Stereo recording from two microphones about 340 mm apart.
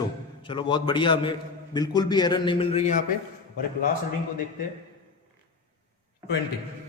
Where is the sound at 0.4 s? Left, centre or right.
Centre.